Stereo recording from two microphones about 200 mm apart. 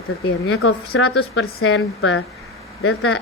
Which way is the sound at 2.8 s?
90° left.